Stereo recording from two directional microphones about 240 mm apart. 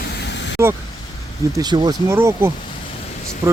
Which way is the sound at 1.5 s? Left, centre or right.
Centre.